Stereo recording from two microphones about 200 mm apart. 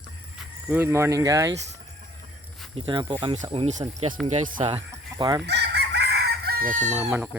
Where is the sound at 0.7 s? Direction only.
10° right (ahead or behind).